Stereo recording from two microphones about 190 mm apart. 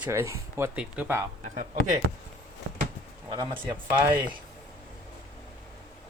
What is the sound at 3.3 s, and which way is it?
Speech, 25° right (ahead or behind).